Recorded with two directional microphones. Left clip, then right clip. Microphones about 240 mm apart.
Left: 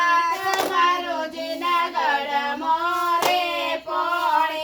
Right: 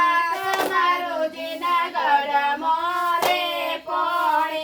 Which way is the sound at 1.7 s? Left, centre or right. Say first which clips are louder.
Right 3 dB; left.